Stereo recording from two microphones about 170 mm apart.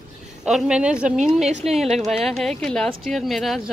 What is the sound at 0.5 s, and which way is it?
Speech, 5° right (ahead or behind).